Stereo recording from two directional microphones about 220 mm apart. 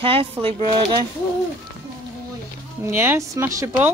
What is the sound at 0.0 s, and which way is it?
Speech, 25° right (ahead or behind).